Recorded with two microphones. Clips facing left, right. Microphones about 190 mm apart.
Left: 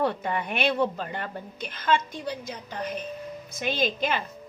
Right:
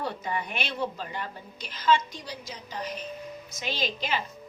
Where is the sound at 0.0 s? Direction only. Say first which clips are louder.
Left 5 dB; 55° left (ahead or behind).